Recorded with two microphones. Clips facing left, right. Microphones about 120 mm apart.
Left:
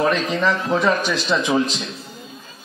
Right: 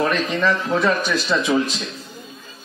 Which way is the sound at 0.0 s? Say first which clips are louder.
Left 1 dB; 10° left (ahead or behind).